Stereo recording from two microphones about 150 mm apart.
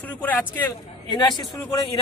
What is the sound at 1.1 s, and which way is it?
Speech, 30° left (ahead or behind).